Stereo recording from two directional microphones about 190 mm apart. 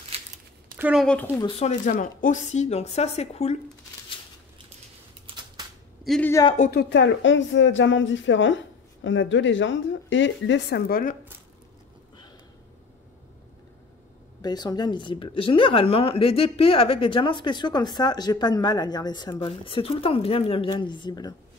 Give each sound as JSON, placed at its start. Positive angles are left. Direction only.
{"t": 0.1, "sound": "a sound", "side_deg": -30}
{"t": 0.7, "sound": "a woman's voice", "side_deg": -10}
{"t": 1.6, "sound": "speech", "side_deg": 40}
{"t": 5.3, "sound": "typewriter", "side_deg": -25}
{"t": 6.0, "sound": "speech", "side_deg": 5}
{"t": 6.6, "sound": "speech", "side_deg": 55}
{"t": 10.9, "sound": "speech", "side_deg": 45}
{"t": 14.4, "sound": "speech", "side_deg": 20}